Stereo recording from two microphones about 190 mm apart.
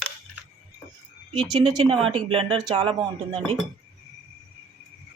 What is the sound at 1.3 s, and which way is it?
Speech, 25° right (ahead or behind).